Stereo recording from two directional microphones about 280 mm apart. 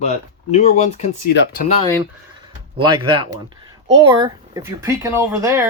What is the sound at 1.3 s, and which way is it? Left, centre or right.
Speech, left.